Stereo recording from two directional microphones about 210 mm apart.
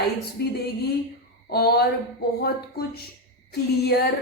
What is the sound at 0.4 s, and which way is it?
A woman's voice, 50° left (ahead or behind).